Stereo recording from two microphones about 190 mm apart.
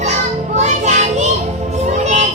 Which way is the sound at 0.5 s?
40° right (ahead or behind).